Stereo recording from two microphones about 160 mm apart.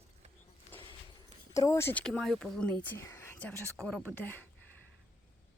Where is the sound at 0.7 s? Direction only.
10° left (ahead or behind).